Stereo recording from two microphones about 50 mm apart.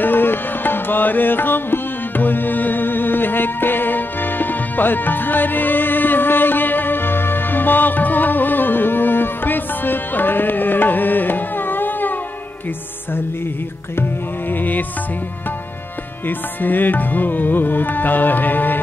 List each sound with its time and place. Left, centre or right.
0.0 s music: left
14.5 s music: left
16.3 s music: left